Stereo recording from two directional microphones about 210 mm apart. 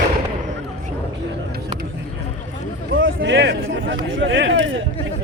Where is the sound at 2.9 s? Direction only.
60° right (ahead or behind).